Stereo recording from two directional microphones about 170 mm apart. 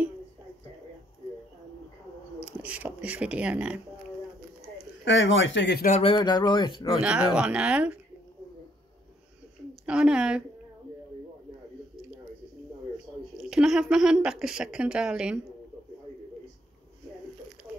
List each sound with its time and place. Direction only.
2.4 s speech: 10° right (ahead or behind)
4.7 s speech: 90° left
5.9 s a sound: 40° left (ahead or behind)
6.1 s speech: 25° left (ahead or behind)
7.0 s a woman's voice: 5° right (ahead or behind)
9.8 s a woman's voice: 5° right (ahead or behind)
13.4 s a woman's voice: 5° right (ahead or behind)